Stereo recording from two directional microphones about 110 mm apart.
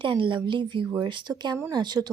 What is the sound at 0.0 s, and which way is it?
A woman's voice, 50° right (ahead or behind).